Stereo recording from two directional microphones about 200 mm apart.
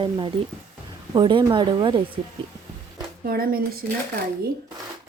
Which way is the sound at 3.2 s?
45° right (ahead or behind).